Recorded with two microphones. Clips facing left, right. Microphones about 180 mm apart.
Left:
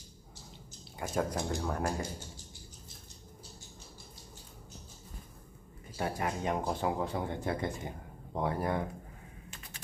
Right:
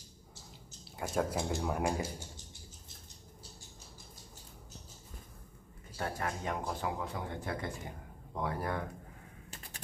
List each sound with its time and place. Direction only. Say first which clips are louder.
0.9 s speech: even; centre (ahead or behind)
1.6 s speech: right 1 dB; 10° right (ahead or behind)
5.9 s a man's voice: left 3 dB; 15° left (ahead or behind)
9.5 s bird: even; 35° right (ahead or behind)